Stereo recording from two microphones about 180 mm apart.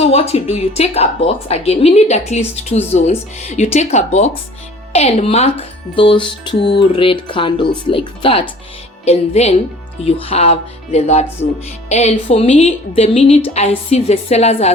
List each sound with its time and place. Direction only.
0.0 s a woman's voice: 35° left (ahead or behind)
6.6 s music: 70° left (ahead or behind)
6.9 s a woman's voice: 30° left (ahead or behind)